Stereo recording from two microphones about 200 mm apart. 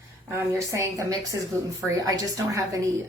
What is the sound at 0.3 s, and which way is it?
Speech, 15° right (ahead or behind).